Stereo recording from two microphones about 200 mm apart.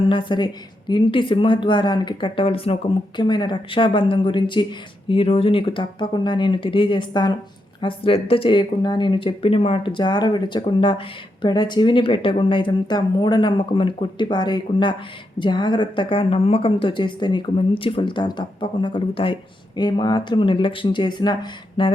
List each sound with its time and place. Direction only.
0.0 s a woman's voice: 25° left (ahead or behind)